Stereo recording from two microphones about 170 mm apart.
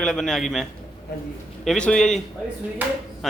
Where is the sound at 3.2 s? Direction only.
Centre (ahead or behind).